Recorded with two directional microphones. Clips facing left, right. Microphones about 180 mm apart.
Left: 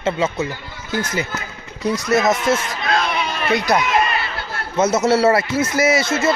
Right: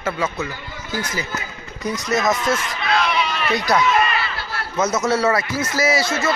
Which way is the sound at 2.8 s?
45° left (ahead or behind).